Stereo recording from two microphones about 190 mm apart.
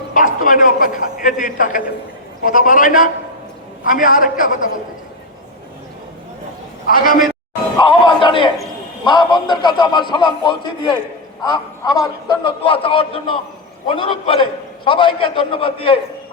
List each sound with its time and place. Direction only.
0.1 s a man's voice: 45° left (ahead or behind)
6.8 s a man's voice: 50° left (ahead or behind)
7.8 s a sound: 25° left (ahead or behind)
9.0 s a man's voice: 25° left (ahead or behind)